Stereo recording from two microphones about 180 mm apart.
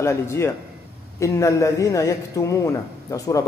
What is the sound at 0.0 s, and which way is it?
Speech, 15° left (ahead or behind).